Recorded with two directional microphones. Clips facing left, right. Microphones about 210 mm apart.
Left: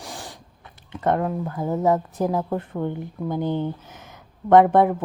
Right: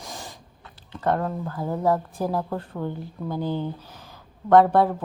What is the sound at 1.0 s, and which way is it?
Speech, 15° left (ahead or behind).